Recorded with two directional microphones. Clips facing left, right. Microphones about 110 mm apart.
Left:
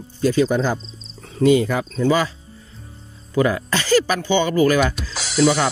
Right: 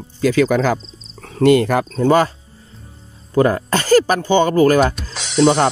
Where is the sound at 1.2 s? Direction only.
60° right (ahead or behind).